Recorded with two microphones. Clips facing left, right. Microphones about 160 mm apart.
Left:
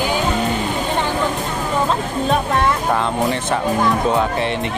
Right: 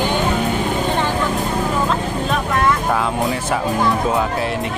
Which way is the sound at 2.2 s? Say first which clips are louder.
Left 2 dB; 30° left (ahead or behind).